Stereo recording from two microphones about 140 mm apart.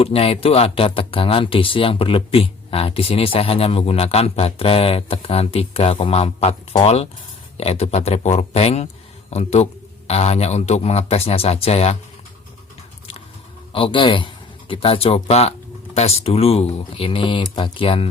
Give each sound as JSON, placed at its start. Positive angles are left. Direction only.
{"t": 0.0, "sound": "speech", "side_deg": 45}
{"t": 13.7, "sound": "speech", "side_deg": 35}